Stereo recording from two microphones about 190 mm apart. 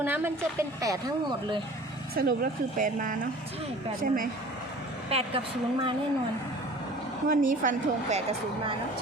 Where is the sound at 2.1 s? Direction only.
45° right (ahead or behind).